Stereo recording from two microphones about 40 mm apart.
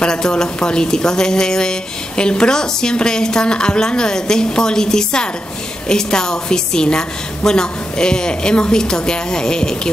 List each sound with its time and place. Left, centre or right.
0.0 s a woman's voice: centre